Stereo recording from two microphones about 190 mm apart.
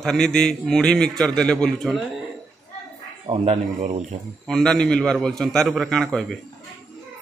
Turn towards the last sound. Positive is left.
turn(degrees=0)  # may be behind; listen again after turning